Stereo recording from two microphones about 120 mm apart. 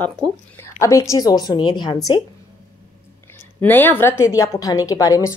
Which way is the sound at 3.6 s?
15° left (ahead or behind).